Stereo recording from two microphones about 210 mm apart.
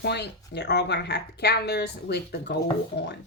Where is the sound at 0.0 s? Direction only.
55° left (ahead or behind).